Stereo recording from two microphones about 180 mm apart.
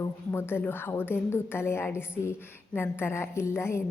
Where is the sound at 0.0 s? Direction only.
15° left (ahead or behind).